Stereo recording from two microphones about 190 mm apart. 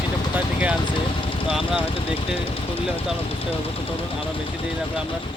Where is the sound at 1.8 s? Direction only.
30° left (ahead or behind).